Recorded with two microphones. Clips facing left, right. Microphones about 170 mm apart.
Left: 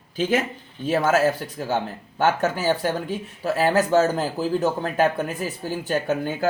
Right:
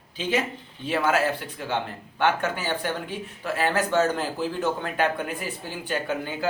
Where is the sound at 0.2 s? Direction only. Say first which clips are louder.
Left 4 dB; 45° left (ahead or behind).